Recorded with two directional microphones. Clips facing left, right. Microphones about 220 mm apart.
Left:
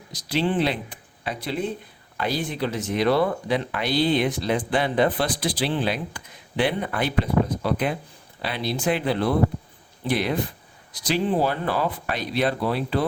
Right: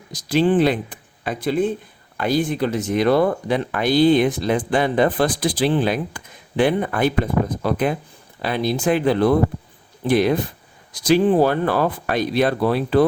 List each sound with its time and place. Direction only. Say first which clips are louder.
0.1 s speech: right 7 dB; 50° right (ahead or behind)